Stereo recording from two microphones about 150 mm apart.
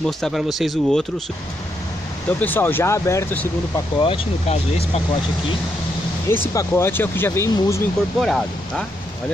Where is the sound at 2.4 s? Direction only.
15° left (ahead or behind).